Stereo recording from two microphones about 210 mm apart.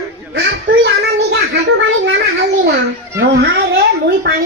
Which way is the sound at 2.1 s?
50° right (ahead or behind).